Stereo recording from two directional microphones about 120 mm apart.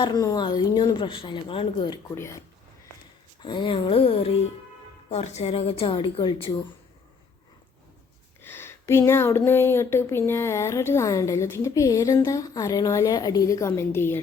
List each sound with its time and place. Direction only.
0.0 s speech: 35° left (ahead or behind)
2.1 s speech: 25° left (ahead or behind)
3.4 s a woman's voice: 45° left (ahead or behind)
5.0 s a woman's voice: 65° left (ahead or behind); by 6.5 s 45° left (ahead or behind)
8.4 s speech: 20° left (ahead or behind)